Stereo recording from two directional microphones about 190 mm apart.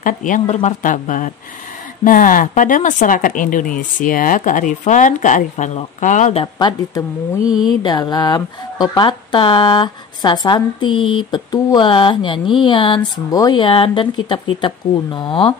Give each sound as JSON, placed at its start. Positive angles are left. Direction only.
{"t": 0.0, "sound": "speech", "side_deg": 45}
{"t": 6.4, "sound": "speech", "side_deg": 20}